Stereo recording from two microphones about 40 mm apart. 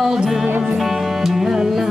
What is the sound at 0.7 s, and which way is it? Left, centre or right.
Music, centre.